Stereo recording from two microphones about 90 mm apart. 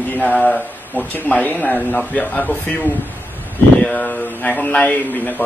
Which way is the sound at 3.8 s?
15° left (ahead or behind).